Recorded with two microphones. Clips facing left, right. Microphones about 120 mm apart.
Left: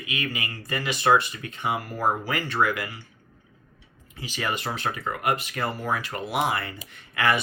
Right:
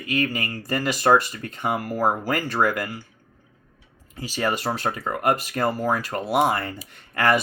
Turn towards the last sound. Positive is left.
turn(degrees=-40)  # may be behind; listen again after turning